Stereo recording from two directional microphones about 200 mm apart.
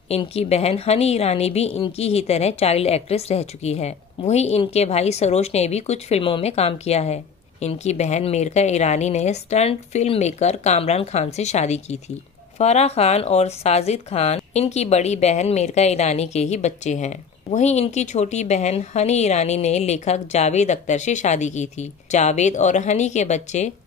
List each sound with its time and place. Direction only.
0.1 s speech: 30° left (ahead or behind)